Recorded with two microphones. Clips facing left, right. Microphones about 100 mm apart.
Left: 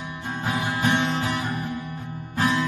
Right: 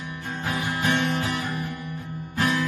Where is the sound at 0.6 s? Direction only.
25° left (ahead or behind).